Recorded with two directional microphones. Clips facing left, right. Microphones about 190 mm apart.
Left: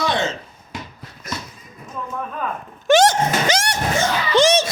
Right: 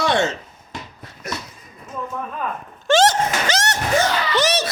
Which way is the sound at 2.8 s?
15° left (ahead or behind).